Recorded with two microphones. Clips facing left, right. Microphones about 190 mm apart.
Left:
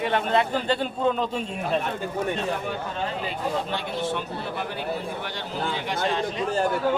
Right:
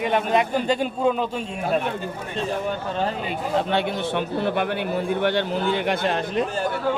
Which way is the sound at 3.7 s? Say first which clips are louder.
Right 5 dB; 65° right (ahead or behind).